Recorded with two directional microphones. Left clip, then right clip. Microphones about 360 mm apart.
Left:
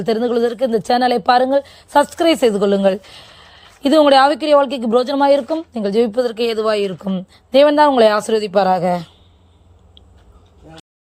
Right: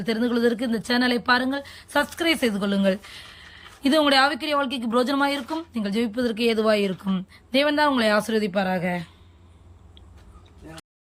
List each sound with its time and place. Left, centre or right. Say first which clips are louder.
0.0 s speech: left 7 dB; centre